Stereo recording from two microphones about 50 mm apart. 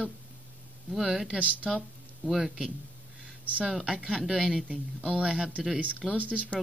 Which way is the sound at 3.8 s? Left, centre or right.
Centre.